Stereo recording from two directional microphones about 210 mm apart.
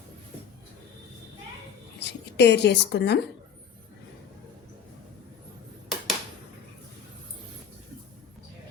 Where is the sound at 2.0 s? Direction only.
55° left (ahead or behind).